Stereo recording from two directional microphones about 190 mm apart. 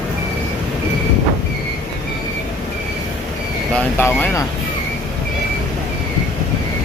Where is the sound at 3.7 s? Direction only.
10° left (ahead or behind).